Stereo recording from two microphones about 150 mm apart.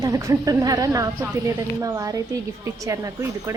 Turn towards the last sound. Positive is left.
turn(degrees=-20)  # may be behind; listen again after turning